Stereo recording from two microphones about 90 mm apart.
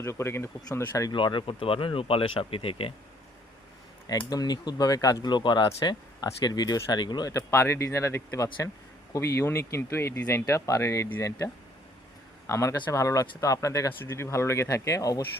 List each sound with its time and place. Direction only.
0.0 s speech: 30° left (ahead or behind)
1.1 s speech: 65° left (ahead or behind); by 2.9 s 90° left
4.3 s speech: 45° left (ahead or behind)
5.3 s speech: 55° left (ahead or behind)
7.3 s speech: 30° left (ahead or behind)
12.5 s speech: 35° left (ahead or behind)